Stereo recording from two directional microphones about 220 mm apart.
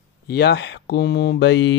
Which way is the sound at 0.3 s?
50° left (ahead or behind).